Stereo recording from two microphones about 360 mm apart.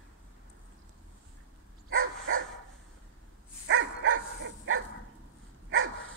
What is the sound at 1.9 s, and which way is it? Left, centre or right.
Dog, right.